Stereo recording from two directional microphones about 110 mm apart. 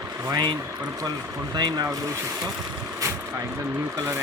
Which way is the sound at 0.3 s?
40° right (ahead or behind).